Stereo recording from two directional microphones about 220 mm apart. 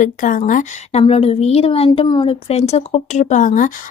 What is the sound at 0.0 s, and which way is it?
A woman's voice, 35° left (ahead or behind).